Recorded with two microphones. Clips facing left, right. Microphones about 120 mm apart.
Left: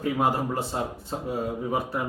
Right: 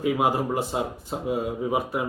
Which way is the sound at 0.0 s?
10° right (ahead or behind).